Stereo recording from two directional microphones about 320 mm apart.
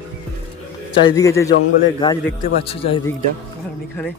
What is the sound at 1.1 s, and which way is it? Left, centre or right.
A man's voice, centre.